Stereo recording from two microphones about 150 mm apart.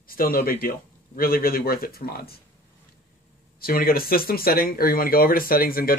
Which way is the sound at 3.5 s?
80° left.